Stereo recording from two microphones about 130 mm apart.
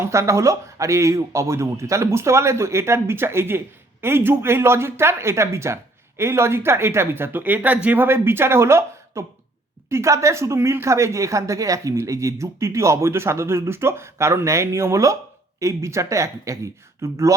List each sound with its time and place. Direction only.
0.0 s a woman's voice: 20° right (ahead or behind)